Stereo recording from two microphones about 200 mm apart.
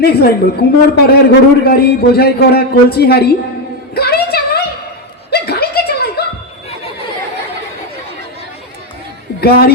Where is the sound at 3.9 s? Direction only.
50° left (ahead or behind).